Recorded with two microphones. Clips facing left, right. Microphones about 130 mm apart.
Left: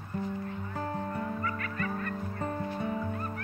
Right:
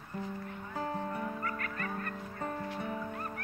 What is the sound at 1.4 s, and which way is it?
Fowl, 45° right (ahead or behind).